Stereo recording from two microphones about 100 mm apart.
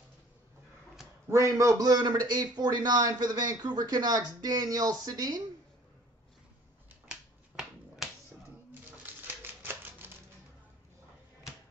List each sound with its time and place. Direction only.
1.3 s a man's voice: 30° right (ahead or behind)
7.1 s finger snapping: 5° right (ahead or behind)
9.0 s typewriter: 20° right (ahead or behind)